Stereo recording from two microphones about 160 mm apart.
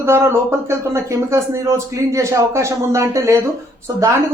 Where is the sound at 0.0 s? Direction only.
15° right (ahead or behind).